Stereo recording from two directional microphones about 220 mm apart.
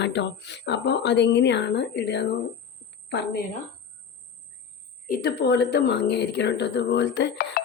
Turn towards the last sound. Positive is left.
turn(degrees=45)  # may be behind; listen again after turning